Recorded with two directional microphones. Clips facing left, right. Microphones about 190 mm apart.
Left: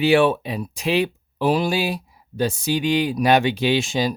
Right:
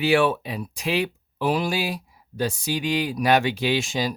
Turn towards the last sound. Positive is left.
turn(degrees=25)  # may be behind; listen again after turning